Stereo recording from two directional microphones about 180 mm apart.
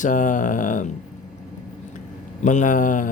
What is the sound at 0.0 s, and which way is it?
Speech, 45° left (ahead or behind).